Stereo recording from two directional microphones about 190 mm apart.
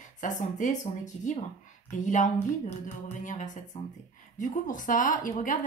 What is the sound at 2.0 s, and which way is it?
Speech, 40° left (ahead or behind).